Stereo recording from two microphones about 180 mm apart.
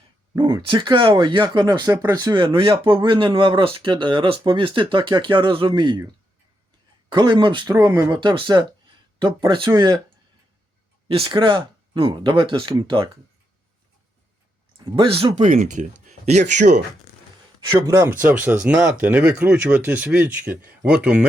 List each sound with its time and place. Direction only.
0.3 s speech: 25° right (ahead or behind)
7.1 s speech: 25° right (ahead or behind)
11.1 s speech: 30° right (ahead or behind)
14.8 s speech: 30° right (ahead or behind)
15.4 s speech: 45° right (ahead or behind)
17.7 s speech: 15° right (ahead or behind)